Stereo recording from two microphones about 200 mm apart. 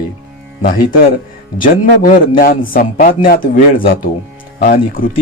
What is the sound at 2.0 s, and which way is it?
A man's voice, 45° left (ahead or behind).